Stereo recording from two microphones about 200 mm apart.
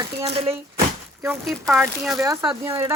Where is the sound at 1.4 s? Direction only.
Centre (ahead or behind).